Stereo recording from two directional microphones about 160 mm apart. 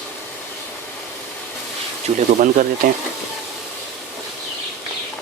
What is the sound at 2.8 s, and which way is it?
Speech, 60° right (ahead or behind).